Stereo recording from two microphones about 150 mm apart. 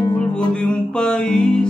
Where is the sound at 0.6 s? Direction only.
5° left (ahead or behind).